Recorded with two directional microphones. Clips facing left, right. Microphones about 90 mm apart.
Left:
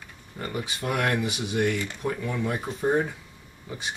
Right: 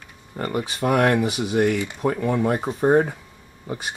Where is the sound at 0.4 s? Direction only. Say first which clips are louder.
Right 7 dB; 55° right (ahead or behind).